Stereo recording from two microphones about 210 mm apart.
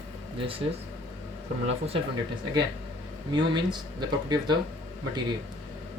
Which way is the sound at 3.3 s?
20° right (ahead or behind).